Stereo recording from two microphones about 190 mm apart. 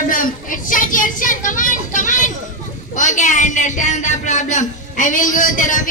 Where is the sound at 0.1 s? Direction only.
45° left (ahead or behind).